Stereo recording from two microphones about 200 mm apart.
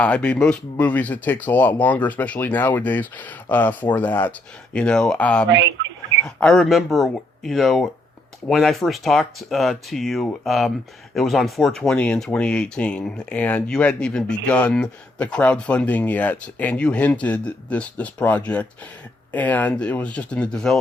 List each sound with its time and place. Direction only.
0.0 s speech: 5° left (ahead or behind)
5.5 s a sound: 65° right (ahead or behind)
6.2 s speech: 5° left (ahead or behind)